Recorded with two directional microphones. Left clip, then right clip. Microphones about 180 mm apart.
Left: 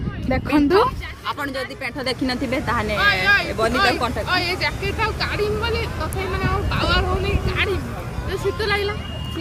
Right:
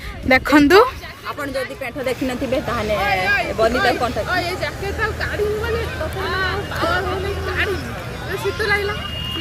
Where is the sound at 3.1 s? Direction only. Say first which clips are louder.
Left 3 dB; 30° left (ahead or behind).